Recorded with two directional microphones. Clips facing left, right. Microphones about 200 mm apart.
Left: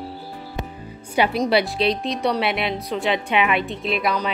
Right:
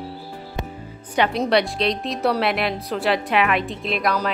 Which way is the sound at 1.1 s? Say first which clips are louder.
Even; 10° left (ahead or behind).